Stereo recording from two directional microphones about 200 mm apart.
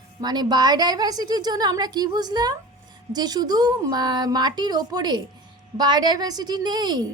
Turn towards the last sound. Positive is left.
turn(degrees=-20)  # may be behind; listen again after turning